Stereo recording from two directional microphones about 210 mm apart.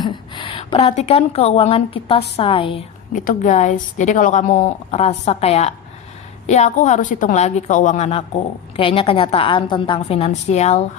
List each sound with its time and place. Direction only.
0.0 s a woman's voice: 25° left (ahead or behind)
3.2 s a woman's voice: 35° left (ahead or behind)